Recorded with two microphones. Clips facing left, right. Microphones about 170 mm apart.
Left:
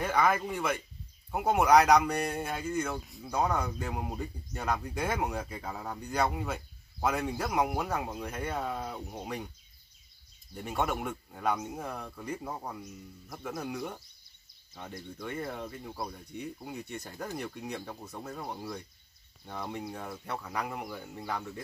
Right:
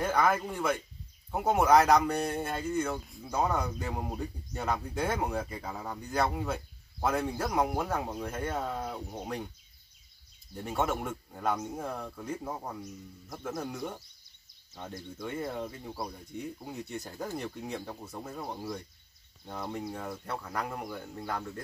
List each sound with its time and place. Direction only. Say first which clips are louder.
0.0 s a man's voice: even; 5° right (ahead or behind)
8.5 s a man's voice: right 1 dB; centre (ahead or behind)
11.1 s a man's voice: even; 5° right (ahead or behind)
13.3 s a man's voice: even; centre (ahead or behind)